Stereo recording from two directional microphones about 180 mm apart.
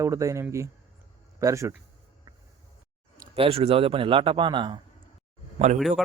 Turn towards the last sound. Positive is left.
turn(degrees=0)  # may be behind; listen again after turning